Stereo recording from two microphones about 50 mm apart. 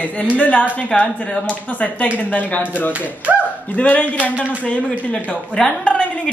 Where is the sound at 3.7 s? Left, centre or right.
Left.